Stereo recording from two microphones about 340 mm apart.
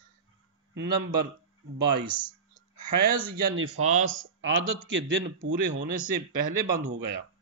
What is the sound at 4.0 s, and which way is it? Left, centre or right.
Speech, right.